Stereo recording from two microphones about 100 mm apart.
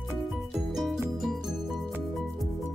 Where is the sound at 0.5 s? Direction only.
Centre (ahead or behind).